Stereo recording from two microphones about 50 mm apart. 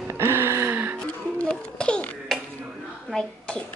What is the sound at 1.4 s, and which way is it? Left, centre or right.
Babbling, centre.